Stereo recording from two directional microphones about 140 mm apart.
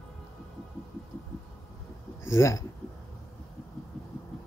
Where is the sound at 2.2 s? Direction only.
20° left (ahead or behind).